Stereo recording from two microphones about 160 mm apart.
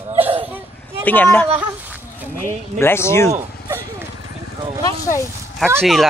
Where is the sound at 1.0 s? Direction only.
10° left (ahead or behind).